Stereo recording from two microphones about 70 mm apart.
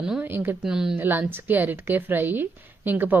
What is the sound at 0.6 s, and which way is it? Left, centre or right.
Speech, centre.